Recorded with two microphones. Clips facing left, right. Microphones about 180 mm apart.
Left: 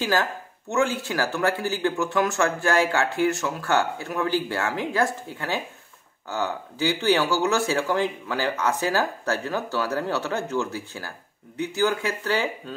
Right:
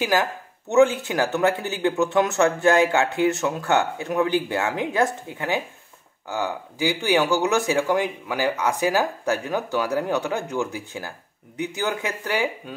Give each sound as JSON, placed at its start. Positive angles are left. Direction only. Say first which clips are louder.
{"t": 0.0, "sound": "speech", "louder": "right 2 dB", "side_deg": -15}